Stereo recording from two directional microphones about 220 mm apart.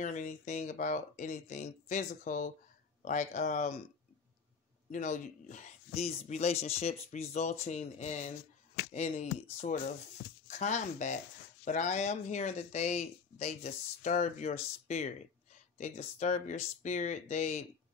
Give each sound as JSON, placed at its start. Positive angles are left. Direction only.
{"t": 0.0, "sound": "speech", "side_deg": 35}
{"t": 4.9, "sound": "speech", "side_deg": 35}
{"t": 10.2, "sound": "speech", "side_deg": 55}
{"t": 10.6, "sound": "speech", "side_deg": 35}